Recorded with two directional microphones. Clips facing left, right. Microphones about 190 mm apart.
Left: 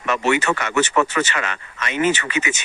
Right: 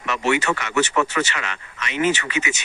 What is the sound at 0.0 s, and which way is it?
Speech, 50° left (ahead or behind).